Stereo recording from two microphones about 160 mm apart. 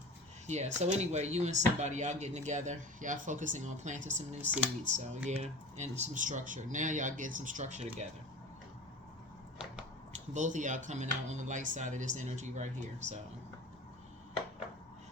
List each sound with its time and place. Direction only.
0.4 s speech: 45° right (ahead or behind)
10.3 s speech: 50° right (ahead or behind)